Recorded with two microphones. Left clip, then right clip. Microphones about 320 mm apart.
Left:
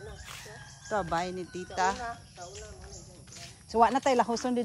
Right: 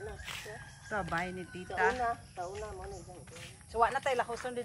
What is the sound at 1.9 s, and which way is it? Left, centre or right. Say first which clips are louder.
Speech: right 4 dB; right.